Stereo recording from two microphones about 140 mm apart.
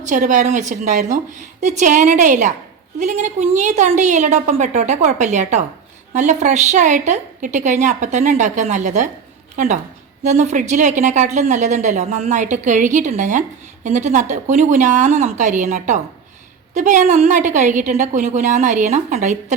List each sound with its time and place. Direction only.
0.0 s a woman's voice: 65° right (ahead or behind)
10.2 s a woman's voice: 60° right (ahead or behind)